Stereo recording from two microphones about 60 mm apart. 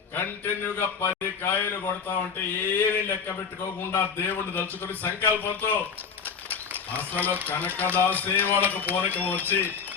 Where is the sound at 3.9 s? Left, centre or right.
Left.